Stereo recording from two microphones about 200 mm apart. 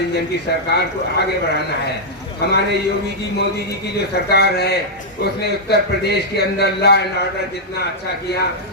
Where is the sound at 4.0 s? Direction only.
55° left (ahead or behind).